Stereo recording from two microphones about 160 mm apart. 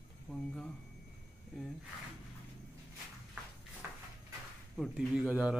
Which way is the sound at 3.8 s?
15° right (ahead or behind).